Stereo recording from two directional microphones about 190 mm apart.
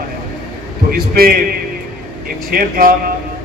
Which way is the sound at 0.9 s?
50° right (ahead or behind).